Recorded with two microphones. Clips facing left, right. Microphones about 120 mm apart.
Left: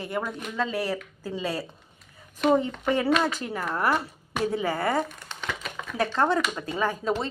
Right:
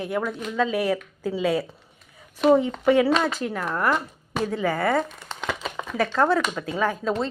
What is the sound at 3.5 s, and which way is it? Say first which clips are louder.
Speech: right 2 dB; 5° left (ahead or behind).